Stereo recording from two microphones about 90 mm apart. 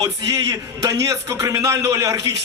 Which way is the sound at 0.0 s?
45° right (ahead or behind).